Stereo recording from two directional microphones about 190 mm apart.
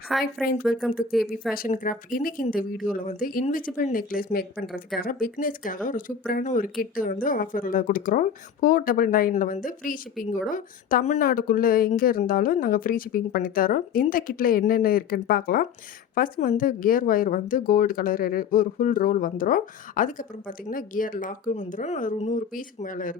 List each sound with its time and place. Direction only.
0.1 s speech: centre (ahead or behind)
1.5 s speech: 45° left (ahead or behind)
4.6 s speech: centre (ahead or behind)
4.9 s speech: 45° left (ahead or behind)